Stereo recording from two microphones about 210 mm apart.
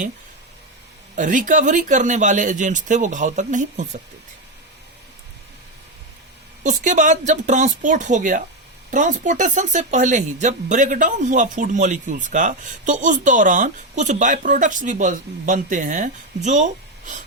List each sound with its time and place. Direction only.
1.1 s speech: 35° right (ahead or behind)
6.6 s speech: 35° right (ahead or behind)